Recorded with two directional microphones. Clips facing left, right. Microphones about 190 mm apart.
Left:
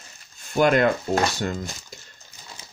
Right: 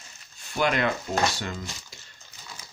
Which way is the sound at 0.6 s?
45° left (ahead or behind).